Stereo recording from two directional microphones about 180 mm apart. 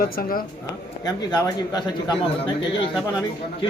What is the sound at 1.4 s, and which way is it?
Speech, 20° left (ahead or behind).